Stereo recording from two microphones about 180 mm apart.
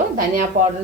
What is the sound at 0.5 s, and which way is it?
Dishes, 50° right (ahead or behind).